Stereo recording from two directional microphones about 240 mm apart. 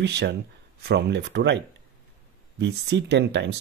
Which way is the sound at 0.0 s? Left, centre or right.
Right.